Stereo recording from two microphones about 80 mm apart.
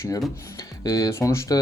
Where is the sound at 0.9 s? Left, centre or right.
Left.